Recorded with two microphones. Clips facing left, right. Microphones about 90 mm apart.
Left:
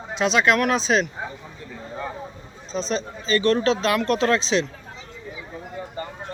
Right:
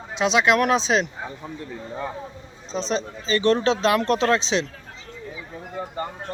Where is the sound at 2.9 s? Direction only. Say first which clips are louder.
Left 1 dB; 20° right (ahead or behind).